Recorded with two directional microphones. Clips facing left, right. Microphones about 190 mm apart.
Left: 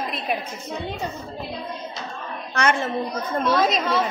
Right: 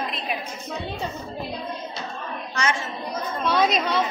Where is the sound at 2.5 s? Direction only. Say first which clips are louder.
Left 5 dB; 60° left (ahead or behind).